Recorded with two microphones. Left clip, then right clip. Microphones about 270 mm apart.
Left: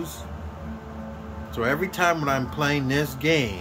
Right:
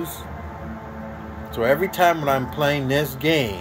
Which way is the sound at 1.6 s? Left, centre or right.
Centre.